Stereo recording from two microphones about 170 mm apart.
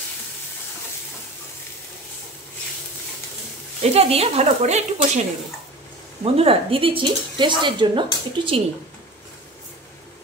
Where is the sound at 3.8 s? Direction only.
35° right (ahead or behind).